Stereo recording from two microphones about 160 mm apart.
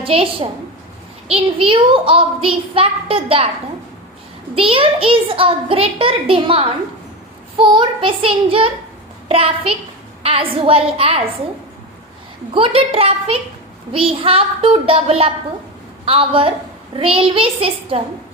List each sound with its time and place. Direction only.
0.0 s a woman's voice: 35° right (ahead or behind)
4.5 s a child's voice: 35° right (ahead or behind)
12.5 s a child's voice: 35° right (ahead or behind)